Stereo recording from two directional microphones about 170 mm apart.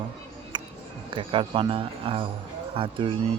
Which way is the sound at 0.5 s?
25° right (ahead or behind).